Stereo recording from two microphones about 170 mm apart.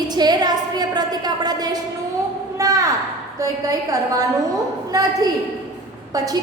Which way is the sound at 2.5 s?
20° right (ahead or behind).